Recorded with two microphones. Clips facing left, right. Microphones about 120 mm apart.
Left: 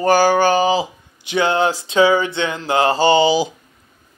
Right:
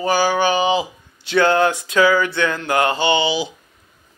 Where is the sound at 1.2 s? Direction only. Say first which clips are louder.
Right 1 dB; 20° left (ahead or behind); by 3.5 s 40° left (ahead or behind).